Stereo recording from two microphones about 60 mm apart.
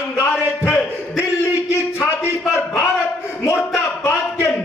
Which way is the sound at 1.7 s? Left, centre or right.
Left.